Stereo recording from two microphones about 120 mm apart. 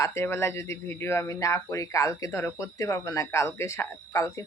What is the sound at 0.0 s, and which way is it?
Speech, 20° left (ahead or behind).